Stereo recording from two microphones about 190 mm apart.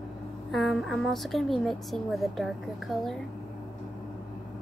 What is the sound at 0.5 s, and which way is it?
A woman's voice, centre (ahead or behind).